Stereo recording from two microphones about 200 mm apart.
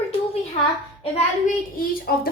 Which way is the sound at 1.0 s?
30° left (ahead or behind).